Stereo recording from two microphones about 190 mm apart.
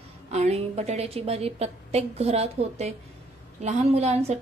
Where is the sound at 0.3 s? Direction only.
35° right (ahead or behind).